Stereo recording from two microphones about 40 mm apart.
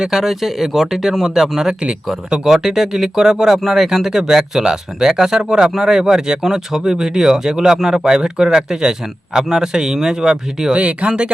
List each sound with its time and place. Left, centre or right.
0.1 s speech: centre
10.8 s speech: right